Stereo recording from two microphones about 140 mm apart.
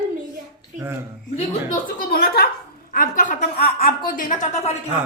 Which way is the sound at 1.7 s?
90° left.